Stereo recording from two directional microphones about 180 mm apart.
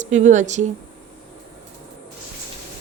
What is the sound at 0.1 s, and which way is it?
Speech, 40° right (ahead or behind).